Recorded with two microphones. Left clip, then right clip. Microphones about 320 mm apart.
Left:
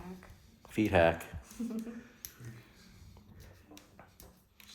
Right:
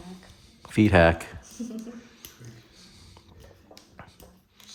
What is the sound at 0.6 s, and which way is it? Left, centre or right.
Speech, right.